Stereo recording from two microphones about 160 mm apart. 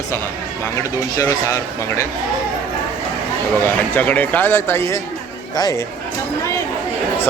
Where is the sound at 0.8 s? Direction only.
20° left (ahead or behind).